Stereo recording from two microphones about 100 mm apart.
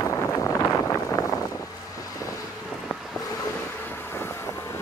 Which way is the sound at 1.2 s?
40° left (ahead or behind).